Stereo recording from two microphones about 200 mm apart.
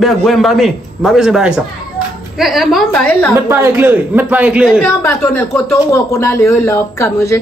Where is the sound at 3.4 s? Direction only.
10° right (ahead or behind); by 7.3 s 15° left (ahead or behind).